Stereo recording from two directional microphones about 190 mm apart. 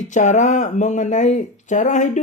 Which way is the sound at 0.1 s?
40° left (ahead or behind).